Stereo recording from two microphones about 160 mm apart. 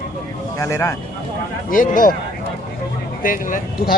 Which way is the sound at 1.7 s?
60° left (ahead or behind).